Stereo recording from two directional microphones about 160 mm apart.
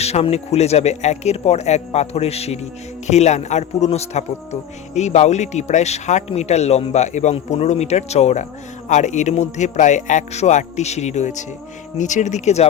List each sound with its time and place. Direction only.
0.0 s a man's voice: 40° left (ahead or behind)